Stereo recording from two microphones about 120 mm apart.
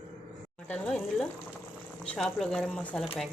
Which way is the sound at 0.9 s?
5° left (ahead or behind).